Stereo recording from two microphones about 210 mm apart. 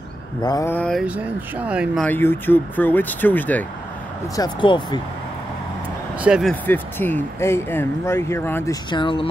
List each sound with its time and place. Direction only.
0.4 s speech: 15° left (ahead or behind)
1.0 s speech: 5° right (ahead or behind)
2.0 s speech: 10° left (ahead or behind)
4.4 s speech: 20° left (ahead or behind)
6.2 s speech: 5° right (ahead or behind)
6.5 s speech: 10° left (ahead or behind)
8.9 s speech: 25° left (ahead or behind)